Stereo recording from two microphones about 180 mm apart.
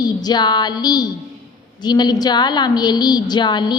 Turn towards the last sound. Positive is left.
turn(degrees=25)  # may be behind; listen again after turning